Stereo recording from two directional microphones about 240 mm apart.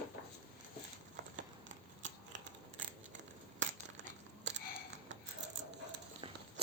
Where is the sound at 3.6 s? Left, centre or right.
Right.